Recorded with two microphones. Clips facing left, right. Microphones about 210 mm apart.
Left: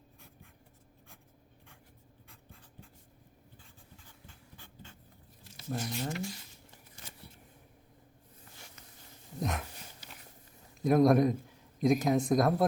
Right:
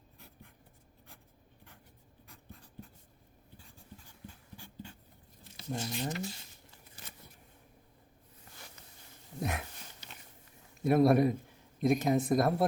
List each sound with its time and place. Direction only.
5.8 s speech: 20° right (ahead or behind)
9.4 s a sound: 5° right (ahead or behind)
10.8 s speech: 5° right (ahead or behind)